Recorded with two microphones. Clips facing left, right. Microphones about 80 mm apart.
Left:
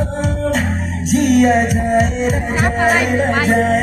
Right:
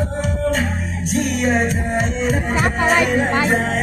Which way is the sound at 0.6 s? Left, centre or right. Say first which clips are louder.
Left 3 dB; left.